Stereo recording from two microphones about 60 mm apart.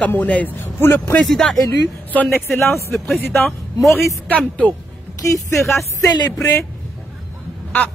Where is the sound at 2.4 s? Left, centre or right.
Left.